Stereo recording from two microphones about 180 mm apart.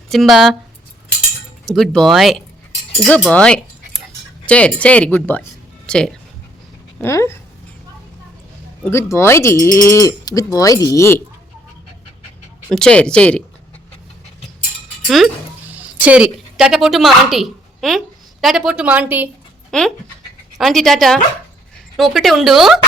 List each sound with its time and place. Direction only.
0.1 s speech: centre (ahead or behind)
1.6 s speech: centre (ahead or behind)
7.0 s speech: 15° left (ahead or behind)
8.8 s speech: 15° left (ahead or behind)
12.7 s speech: 5° left (ahead or behind)
15.0 s cutlery: centre (ahead or behind)
16.0 s speech: 5° right (ahead or behind)
19.7 s speech: 5° left (ahead or behind)